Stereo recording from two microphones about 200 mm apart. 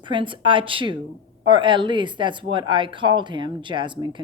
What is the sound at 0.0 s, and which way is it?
A woman's voice, 25° right (ahead or behind).